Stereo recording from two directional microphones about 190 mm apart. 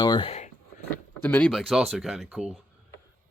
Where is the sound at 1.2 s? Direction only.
10° left (ahead or behind).